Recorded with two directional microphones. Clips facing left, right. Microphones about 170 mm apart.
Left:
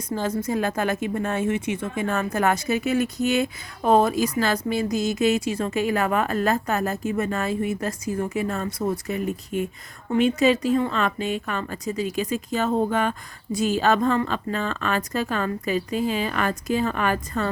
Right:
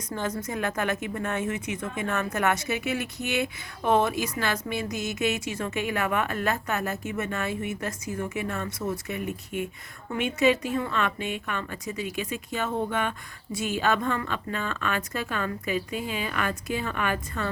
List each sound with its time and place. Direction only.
0.1 s a woman's voice: 30° left (ahead or behind)